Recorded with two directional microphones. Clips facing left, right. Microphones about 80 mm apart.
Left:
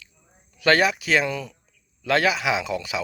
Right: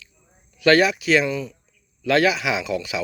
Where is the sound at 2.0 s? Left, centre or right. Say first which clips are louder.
Right 2 dB; left.